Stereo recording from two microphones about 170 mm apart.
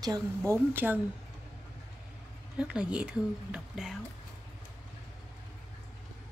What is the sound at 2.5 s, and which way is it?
Speech, 5° right (ahead or behind).